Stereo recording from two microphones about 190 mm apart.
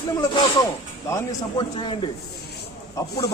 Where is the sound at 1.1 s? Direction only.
20° left (ahead or behind).